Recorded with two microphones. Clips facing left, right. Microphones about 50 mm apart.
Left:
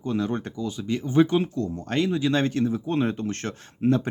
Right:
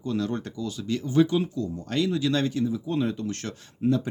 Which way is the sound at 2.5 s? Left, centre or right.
Left.